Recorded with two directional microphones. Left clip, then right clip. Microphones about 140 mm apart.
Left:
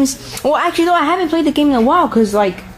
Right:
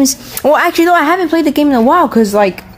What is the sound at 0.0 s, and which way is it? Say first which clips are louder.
Speech: right 4 dB; 40° right (ahead or behind).